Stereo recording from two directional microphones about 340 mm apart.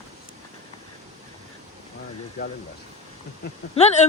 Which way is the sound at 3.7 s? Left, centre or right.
Centre.